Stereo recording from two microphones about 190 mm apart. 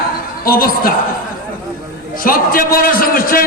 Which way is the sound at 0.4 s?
50° left (ahead or behind).